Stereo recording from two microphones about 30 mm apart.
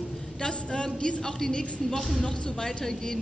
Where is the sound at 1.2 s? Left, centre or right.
Centre.